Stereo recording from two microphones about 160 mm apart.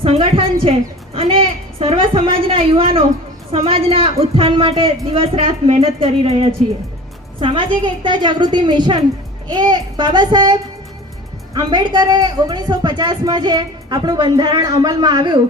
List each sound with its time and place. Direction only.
0.0 s a woman's voice: 35° right (ahead or behind)